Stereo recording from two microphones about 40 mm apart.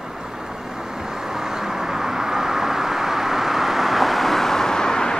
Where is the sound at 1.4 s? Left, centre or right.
Centre.